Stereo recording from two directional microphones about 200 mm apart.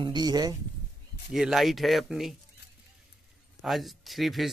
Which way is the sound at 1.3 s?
Centre (ahead or behind).